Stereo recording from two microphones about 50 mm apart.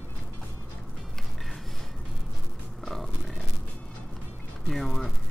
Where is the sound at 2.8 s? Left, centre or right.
Centre.